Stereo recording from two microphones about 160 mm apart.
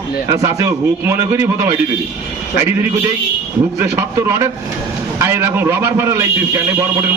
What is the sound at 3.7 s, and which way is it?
Speech, 20° right (ahead or behind).